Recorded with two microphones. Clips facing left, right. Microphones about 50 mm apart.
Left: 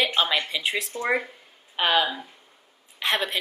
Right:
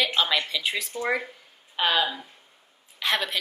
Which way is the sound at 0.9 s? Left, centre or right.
Centre.